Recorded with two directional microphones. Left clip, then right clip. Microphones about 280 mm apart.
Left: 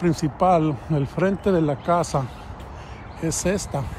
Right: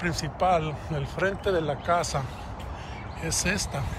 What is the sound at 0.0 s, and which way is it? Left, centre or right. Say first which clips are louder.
Speech: left 5 dB; centre.